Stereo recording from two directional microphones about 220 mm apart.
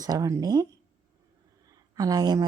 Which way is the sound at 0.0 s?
15° right (ahead or behind).